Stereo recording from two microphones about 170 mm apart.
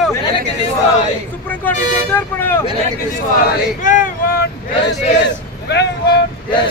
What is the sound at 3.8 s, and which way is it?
Speech, 50° left (ahead or behind).